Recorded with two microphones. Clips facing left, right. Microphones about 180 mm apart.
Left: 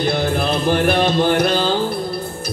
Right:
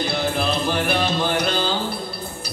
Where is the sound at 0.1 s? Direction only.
50° left (ahead or behind).